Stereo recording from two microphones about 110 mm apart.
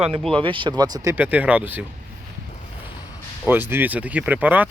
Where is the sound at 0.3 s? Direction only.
50° right (ahead or behind).